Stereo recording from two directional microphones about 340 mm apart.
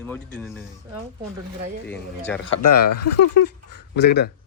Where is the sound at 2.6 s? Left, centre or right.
Left.